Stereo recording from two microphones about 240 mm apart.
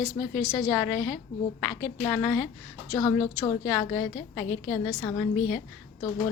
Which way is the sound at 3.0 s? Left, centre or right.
Centre.